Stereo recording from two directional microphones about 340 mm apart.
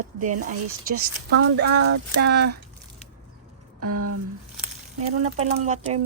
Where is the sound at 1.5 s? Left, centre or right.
Right.